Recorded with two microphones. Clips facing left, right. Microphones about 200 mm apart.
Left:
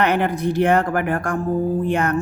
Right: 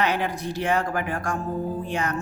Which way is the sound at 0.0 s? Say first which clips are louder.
Left 6 dB; 55° left (ahead or behind).